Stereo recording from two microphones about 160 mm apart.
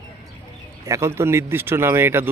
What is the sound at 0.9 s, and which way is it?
Speech, 20° right (ahead or behind).